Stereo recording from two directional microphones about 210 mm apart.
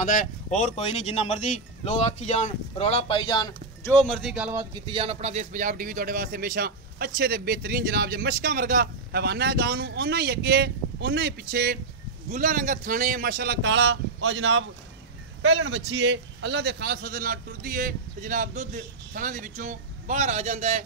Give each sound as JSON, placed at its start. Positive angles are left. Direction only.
{"t": 0.0, "sound": "speech", "side_deg": 40}
{"t": 4.0, "sound": "speech", "side_deg": 0}
{"t": 4.6, "sound": "speech", "side_deg": -25}